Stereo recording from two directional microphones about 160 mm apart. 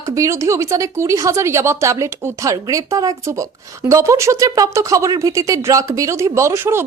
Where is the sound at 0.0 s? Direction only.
20° right (ahead or behind).